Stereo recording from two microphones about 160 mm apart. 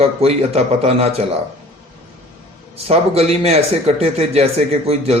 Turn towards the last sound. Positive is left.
turn(degrees=-40)  # may be behind; listen again after turning